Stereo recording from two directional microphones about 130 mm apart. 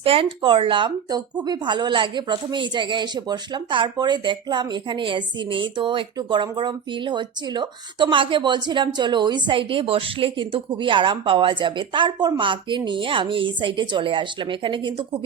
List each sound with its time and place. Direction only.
0.0 s speech: 45° right (ahead or behind)